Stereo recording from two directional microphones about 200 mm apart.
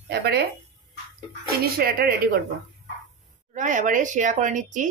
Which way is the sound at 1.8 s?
50° right (ahead or behind).